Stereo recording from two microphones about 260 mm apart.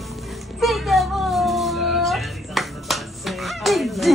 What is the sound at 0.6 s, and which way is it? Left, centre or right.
Cat, centre.